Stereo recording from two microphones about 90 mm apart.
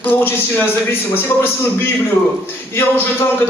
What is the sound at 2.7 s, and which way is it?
Speech, 25° left (ahead or behind).